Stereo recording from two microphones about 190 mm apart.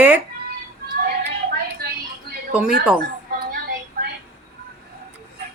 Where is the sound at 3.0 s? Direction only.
50° right (ahead or behind).